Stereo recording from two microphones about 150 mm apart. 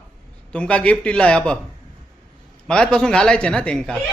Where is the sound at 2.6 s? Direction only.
5° left (ahead or behind).